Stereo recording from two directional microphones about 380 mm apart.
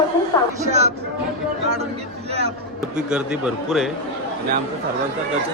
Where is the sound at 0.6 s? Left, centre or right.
Centre.